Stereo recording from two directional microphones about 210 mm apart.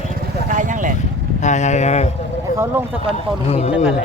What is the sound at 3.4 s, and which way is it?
Speech, 25° left (ahead or behind).